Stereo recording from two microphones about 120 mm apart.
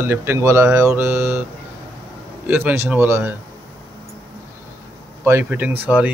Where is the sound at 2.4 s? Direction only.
20° right (ahead or behind).